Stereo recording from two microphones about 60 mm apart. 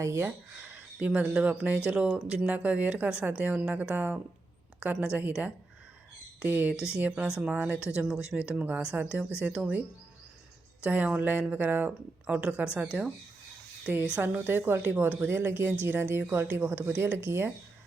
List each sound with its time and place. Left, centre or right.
0.2 s speech: right
6.4 s speech: right
6.7 s speech: left
7.3 s speech: centre
10.8 s speech: right